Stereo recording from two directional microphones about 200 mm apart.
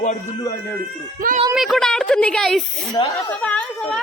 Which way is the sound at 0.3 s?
20° left (ahead or behind).